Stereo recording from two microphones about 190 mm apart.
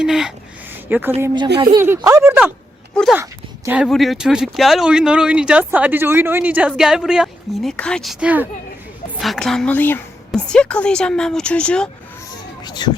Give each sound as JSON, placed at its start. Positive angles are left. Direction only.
{"t": 0.0, "sound": "a woman's voice", "side_deg": 0}
{"t": 1.5, "sound": "speech", "side_deg": -20}
{"t": 2.9, "sound": "speech", "side_deg": 5}
{"t": 12.6, "sound": "music", "side_deg": 20}